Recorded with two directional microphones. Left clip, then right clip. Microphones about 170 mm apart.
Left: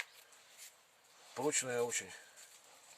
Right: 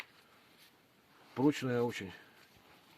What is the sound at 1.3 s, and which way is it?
Speech, 40° left (ahead or behind).